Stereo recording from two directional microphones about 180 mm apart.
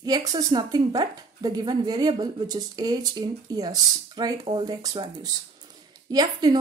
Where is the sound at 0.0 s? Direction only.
20° right (ahead or behind).